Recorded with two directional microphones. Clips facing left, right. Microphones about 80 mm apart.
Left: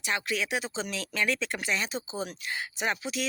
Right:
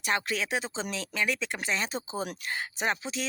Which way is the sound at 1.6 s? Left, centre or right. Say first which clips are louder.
Even; right.